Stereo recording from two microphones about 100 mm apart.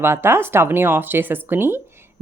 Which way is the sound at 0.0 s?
25° right (ahead or behind).